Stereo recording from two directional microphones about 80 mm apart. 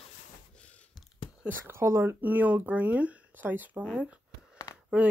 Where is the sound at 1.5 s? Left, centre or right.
Right.